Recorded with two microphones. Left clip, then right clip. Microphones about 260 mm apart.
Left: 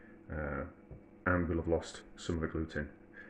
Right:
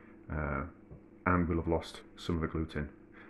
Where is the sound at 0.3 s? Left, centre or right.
Right.